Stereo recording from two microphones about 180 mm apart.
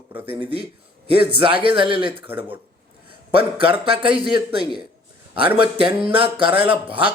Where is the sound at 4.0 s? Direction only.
30° right (ahead or behind).